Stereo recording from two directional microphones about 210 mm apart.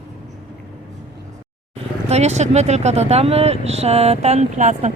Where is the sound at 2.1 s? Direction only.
30° right (ahead or behind).